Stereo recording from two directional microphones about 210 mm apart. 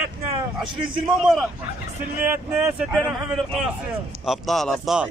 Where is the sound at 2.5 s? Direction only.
5° right (ahead or behind).